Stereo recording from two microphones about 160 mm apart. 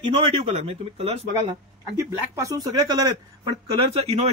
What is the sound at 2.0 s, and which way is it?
Speech, 20° right (ahead or behind).